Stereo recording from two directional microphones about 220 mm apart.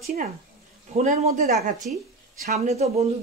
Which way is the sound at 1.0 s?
35° right (ahead or behind).